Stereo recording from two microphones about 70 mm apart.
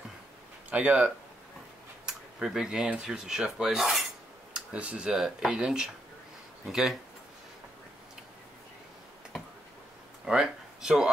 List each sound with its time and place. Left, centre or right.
0.7 s speech: centre
4.6 s speech: centre
10.2 s a sound: centre